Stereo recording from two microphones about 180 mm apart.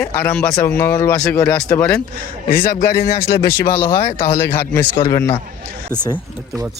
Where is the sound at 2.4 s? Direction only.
55° left (ahead or behind).